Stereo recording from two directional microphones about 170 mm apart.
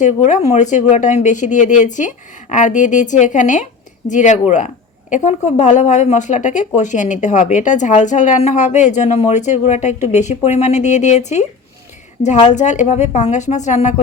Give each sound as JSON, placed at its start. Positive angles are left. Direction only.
{"t": 0.0, "sound": "a woman's voice", "side_deg": 45}